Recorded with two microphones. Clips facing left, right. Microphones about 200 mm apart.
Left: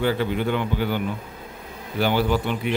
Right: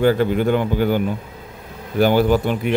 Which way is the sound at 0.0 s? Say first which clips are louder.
Right 6 dB; 45° right (ahead or behind).